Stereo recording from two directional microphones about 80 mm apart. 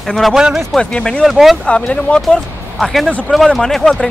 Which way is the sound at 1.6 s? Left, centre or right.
Centre.